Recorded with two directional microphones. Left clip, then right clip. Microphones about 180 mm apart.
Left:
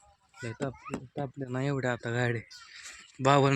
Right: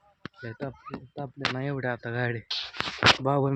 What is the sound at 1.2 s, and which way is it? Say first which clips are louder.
A man's voice: right 5 dB; 10° left (ahead or behind).